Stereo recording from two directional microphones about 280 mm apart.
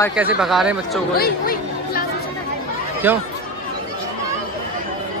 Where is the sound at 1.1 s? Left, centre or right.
Left.